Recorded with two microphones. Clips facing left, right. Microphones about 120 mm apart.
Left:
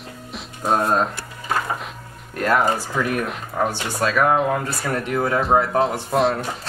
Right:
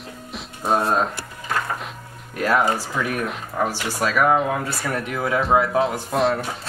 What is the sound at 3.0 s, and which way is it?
A man's voice, centre (ahead or behind).